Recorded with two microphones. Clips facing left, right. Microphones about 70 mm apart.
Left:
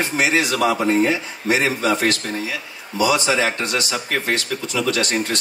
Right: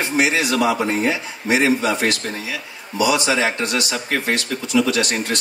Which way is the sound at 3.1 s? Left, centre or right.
Right.